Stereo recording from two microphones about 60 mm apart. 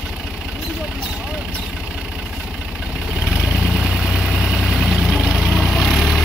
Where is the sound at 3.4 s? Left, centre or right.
Centre.